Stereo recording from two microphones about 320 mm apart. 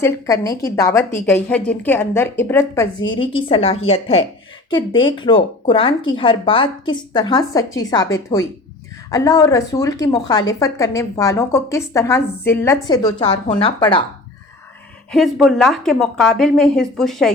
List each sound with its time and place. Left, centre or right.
0.0 s a woman's voice: centre
15.1 s a woman's voice: centre